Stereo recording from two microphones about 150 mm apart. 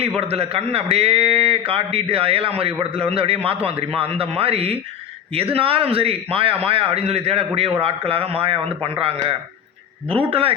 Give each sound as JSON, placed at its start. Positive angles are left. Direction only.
{"t": 0.2, "sound": "a man's voice", "side_deg": -40}